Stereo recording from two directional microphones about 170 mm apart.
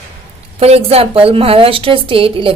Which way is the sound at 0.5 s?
35° right (ahead or behind).